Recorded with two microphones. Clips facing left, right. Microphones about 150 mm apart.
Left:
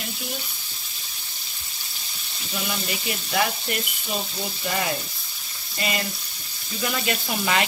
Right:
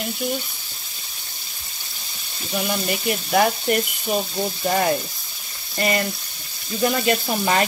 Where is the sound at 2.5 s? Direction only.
50° right (ahead or behind).